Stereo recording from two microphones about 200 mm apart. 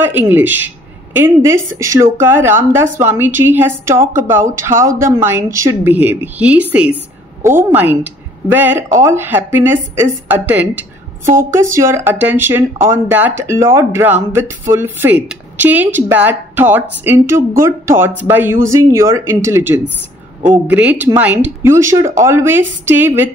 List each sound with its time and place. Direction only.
0.0 s speech: 10° right (ahead or behind)